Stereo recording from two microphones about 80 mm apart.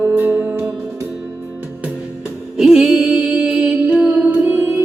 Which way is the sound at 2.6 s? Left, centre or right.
Centre.